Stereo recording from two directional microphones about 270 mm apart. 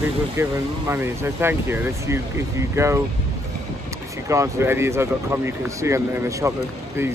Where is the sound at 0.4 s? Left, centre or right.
Centre.